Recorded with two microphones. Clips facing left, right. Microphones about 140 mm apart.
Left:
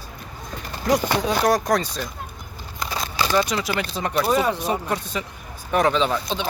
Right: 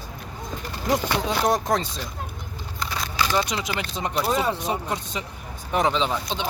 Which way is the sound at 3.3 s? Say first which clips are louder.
Left 6 dB; 20° right (ahead or behind).